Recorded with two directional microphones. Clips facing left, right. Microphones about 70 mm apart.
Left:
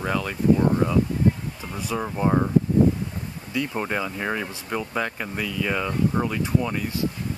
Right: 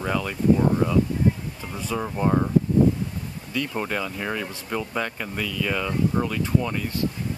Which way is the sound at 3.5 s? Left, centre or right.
Centre.